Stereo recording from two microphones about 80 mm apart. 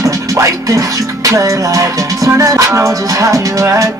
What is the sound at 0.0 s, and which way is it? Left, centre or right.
Music, right.